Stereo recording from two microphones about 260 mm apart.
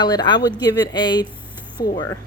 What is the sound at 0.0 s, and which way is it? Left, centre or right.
A woman's voice, centre.